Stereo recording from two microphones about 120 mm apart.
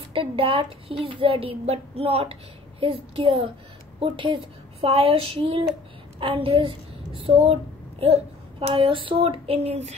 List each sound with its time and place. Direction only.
0.1 s a woman's voice: 50° right (ahead or behind)
4.7 s a child's voice: 55° right (ahead or behind)